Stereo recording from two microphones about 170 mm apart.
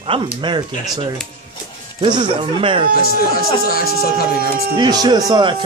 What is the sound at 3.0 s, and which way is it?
Speech, 60° left (ahead or behind).